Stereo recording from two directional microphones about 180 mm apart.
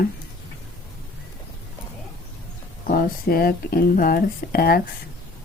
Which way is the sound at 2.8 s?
55° left (ahead or behind).